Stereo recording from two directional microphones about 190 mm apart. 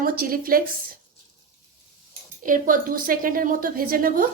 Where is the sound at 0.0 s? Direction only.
50° right (ahead or behind).